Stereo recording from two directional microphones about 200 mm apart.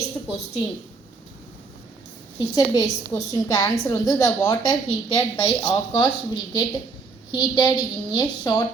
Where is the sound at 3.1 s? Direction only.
15° left (ahead or behind).